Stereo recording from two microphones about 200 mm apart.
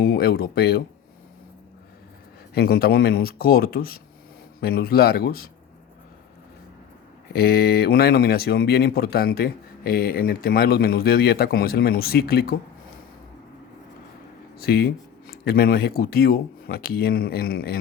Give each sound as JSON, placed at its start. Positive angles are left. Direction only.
{"t": 0.0, "sound": "speech", "side_deg": 50}
{"t": 2.6, "sound": "speech", "side_deg": 50}
{"t": 7.3, "sound": "speech", "side_deg": 50}
{"t": 14.6, "sound": "speech", "side_deg": 50}